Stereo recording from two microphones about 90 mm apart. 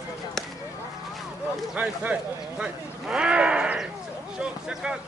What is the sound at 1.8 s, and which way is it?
Speech, 15° right (ahead or behind).